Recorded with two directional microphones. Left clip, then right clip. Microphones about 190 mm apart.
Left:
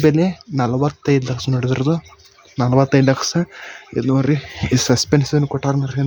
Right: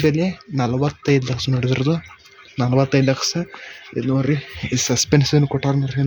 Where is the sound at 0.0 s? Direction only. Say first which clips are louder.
Left 4 dB; 20° left (ahead or behind).